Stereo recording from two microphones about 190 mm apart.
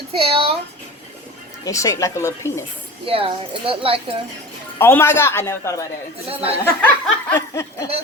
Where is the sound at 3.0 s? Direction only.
30° right (ahead or behind).